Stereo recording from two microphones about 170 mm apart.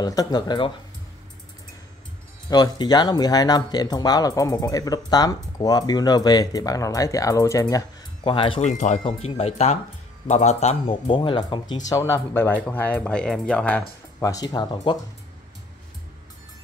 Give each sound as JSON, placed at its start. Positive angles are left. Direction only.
{"t": 0.0, "sound": "speech", "side_deg": 20}
{"t": 2.5, "sound": "speech", "side_deg": 25}
{"t": 8.6, "sound": "a man's voice", "side_deg": 45}
{"t": 14.2, "sound": "speech", "side_deg": 20}